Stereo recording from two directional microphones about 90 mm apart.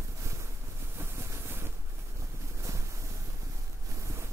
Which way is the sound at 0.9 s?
30° right (ahead or behind).